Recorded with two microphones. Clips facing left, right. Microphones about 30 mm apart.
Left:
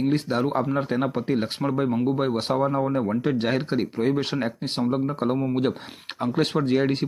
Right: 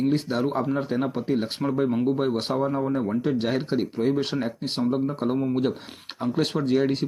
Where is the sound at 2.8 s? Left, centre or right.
Left.